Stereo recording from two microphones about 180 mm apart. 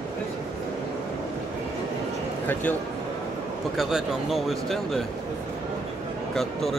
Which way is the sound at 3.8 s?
Centre (ahead or behind).